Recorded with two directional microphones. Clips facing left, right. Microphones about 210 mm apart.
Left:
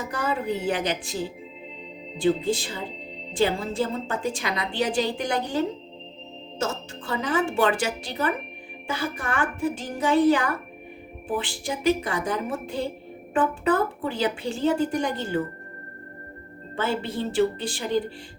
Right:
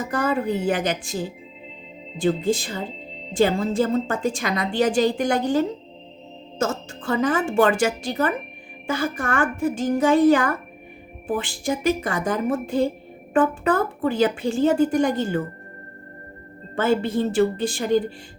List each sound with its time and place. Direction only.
0.1 s a woman's voice: 50° right (ahead or behind)
2.1 s a woman's voice: 45° right (ahead or behind)
16.7 s a woman's voice: 45° right (ahead or behind)